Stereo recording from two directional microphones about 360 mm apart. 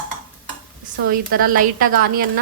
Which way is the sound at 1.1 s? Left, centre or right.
Right.